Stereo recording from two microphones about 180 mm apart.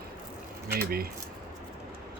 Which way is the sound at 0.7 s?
55° right (ahead or behind).